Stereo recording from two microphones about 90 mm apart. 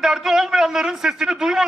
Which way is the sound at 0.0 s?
5° right (ahead or behind).